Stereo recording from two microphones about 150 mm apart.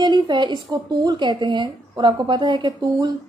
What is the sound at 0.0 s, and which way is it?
A woman's voice, 30° right (ahead or behind).